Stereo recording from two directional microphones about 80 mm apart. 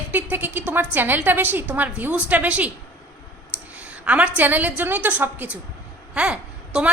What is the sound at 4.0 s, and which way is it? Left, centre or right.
A woman's voice, centre.